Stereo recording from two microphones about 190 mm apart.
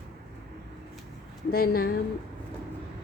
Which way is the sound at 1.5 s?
50° left (ahead or behind).